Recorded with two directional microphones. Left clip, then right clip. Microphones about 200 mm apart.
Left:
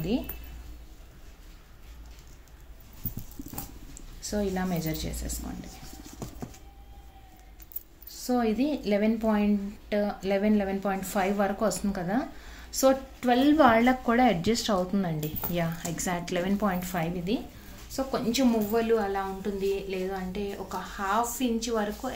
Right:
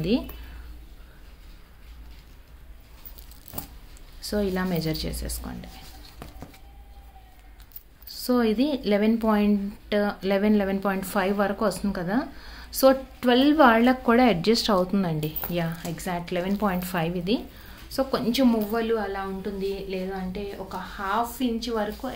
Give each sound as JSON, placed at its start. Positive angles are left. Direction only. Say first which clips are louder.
{"t": 4.2, "sound": "speech", "louder": "right 3 dB", "side_deg": -20}
{"t": 8.1, "sound": "a woman's voice", "louder": "right 4 dB", "side_deg": -25}